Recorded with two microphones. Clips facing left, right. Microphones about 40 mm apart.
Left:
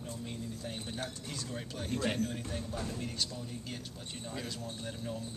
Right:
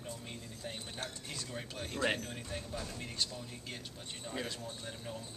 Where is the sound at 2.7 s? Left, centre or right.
Centre.